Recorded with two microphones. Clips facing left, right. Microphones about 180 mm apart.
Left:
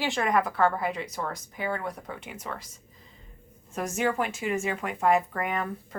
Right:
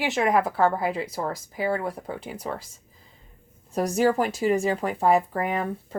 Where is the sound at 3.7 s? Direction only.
35° right (ahead or behind).